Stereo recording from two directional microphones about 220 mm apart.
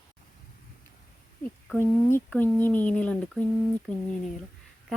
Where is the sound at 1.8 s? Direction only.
10° left (ahead or behind).